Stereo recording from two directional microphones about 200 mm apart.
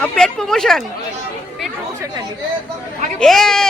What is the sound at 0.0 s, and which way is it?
Speech, 5° left (ahead or behind).